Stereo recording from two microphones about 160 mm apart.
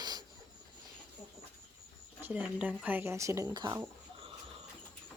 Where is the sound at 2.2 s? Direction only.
10° right (ahead or behind); by 3.8 s 25° right (ahead or behind).